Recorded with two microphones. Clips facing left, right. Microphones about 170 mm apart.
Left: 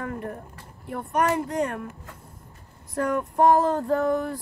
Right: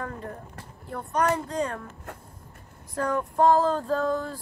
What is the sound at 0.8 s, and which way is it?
Vehicle, 20° left (ahead or behind).